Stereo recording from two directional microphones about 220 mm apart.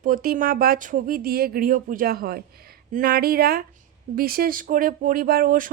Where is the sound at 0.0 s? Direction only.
40° right (ahead or behind).